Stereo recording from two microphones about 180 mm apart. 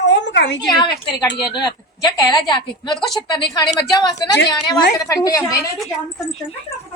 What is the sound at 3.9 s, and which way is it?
A woman's voice, 20° left (ahead or behind).